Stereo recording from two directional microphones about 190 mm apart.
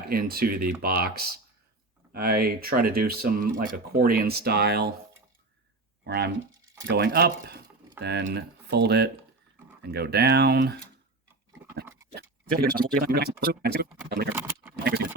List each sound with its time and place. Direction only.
0.1 s speech: 50° right (ahead or behind)
6.1 s speech: 60° right (ahead or behind)
12.1 s speech: 55° right (ahead or behind)